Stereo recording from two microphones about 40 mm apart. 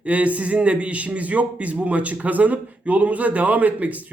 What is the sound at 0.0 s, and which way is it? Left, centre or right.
A man's voice, right.